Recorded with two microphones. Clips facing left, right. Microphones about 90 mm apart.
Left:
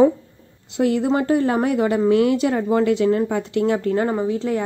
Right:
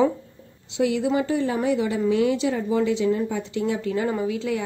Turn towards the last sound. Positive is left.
turn(degrees=40)  # may be behind; listen again after turning